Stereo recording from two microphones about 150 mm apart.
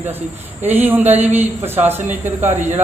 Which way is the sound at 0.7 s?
10° right (ahead or behind).